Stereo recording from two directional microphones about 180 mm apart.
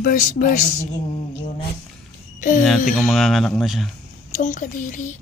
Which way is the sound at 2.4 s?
45° left (ahead or behind).